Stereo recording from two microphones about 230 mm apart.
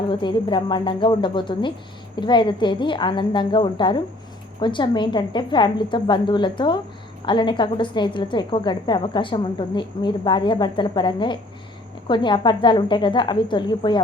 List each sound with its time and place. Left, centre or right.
0.1 s a woman's voice: centre